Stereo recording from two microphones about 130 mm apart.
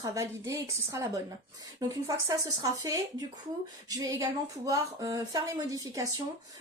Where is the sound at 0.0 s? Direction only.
25° right (ahead or behind).